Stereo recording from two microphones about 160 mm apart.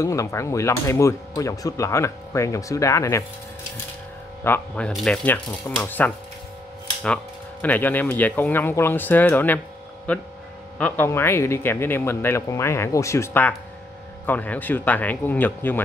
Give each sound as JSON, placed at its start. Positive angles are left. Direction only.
{"t": 0.0, "sound": "speech", "side_deg": 20}
{"t": 4.4, "sound": "speech", "side_deg": 10}
{"t": 7.6, "sound": "speech", "side_deg": 10}
{"t": 10.8, "sound": "speech", "side_deg": 15}